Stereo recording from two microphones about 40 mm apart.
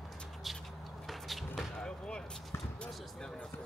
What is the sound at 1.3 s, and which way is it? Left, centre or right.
Basketball bounce, centre.